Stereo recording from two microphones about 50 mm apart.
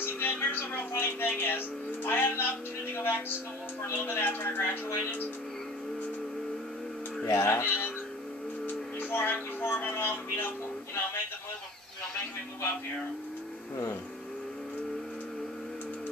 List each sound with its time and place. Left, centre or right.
0.0 s music: left
3.9 s speech: left
7.2 s speech: left
7.6 s speech: left